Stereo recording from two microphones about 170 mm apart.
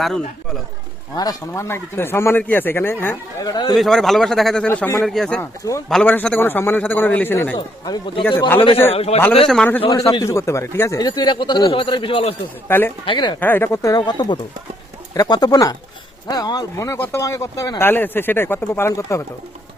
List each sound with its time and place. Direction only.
1.1 s speech: 20° left (ahead or behind)
3.4 s a man's voice: 25° left (ahead or behind)
3.8 s a man's voice: centre (ahead or behind)
5.0 s a man's voice: 5° left (ahead or behind)
5.4 s speech: 20° left (ahead or behind)
7.9 s a man's voice: 30° left (ahead or behind)
9.5 s speech: 5° left (ahead or behind)
9.8 s a man's voice: 35° left (ahead or behind)
10.1 s a man's voice: 20° left (ahead or behind)
12.6 s speech: 15° left (ahead or behind)
13.1 s a man's voice: 25° left (ahead or behind)
13.4 s a man's voice: 10° left (ahead or behind)